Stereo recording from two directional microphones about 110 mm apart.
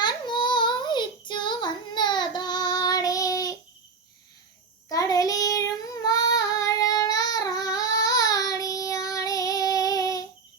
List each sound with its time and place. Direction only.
0.0 s child singing: 45° left (ahead or behind)
4.9 s child singing: 35° left (ahead or behind)